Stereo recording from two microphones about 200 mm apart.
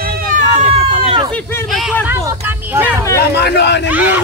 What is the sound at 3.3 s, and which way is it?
Speech, 55° left (ahead or behind).